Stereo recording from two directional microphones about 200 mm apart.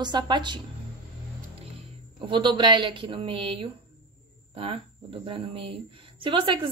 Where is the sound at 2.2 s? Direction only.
25° right (ahead or behind).